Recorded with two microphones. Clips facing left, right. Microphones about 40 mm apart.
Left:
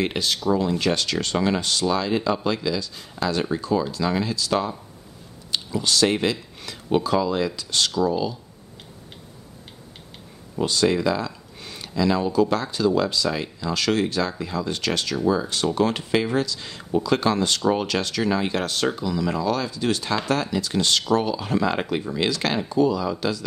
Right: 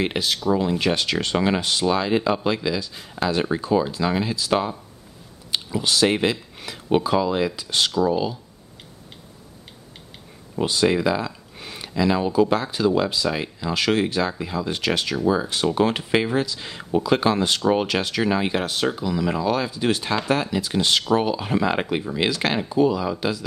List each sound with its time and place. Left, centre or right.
0.0 s speech: centre
10.5 s speech: centre